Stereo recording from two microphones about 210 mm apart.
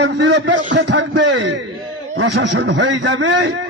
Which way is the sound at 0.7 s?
55° right (ahead or behind).